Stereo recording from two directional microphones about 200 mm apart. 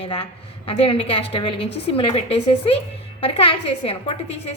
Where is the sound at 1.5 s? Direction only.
55° left (ahead or behind).